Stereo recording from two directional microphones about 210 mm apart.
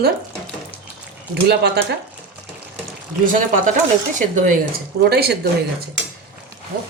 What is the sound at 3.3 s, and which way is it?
Speech, 40° right (ahead or behind).